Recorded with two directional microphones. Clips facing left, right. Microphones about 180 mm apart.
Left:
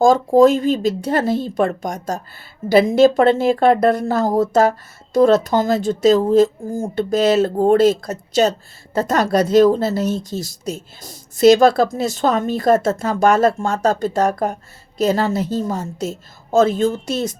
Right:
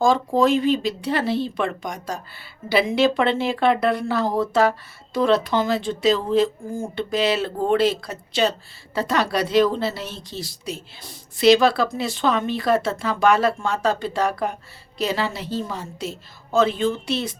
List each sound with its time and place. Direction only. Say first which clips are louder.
0.3 s speech: left 7 dB; 45° left (ahead or behind)